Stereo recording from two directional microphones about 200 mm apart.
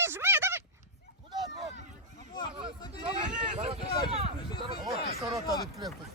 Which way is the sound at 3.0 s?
30° right (ahead or behind).